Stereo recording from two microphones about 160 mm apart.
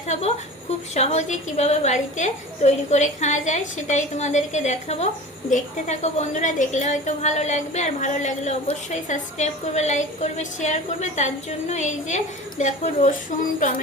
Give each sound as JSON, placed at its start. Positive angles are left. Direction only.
{"t": 0.1, "sound": "a woman's voice", "side_deg": 45}